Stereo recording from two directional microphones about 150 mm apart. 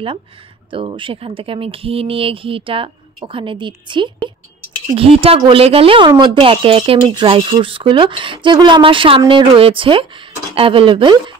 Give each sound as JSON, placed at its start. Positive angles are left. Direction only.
{"t": 0.7, "sound": "speech", "side_deg": -35}